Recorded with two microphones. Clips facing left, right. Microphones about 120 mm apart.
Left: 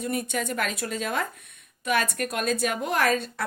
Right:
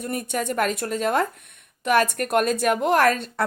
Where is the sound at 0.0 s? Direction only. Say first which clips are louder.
Right 2 dB; 45° right (ahead or behind).